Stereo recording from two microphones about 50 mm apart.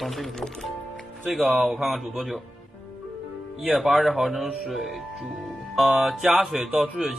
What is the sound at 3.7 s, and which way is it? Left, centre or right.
Speech, centre.